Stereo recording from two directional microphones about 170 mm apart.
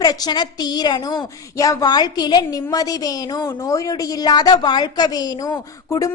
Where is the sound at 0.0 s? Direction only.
20° left (ahead or behind).